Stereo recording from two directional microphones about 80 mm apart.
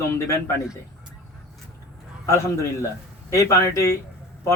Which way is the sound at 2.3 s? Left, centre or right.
Left.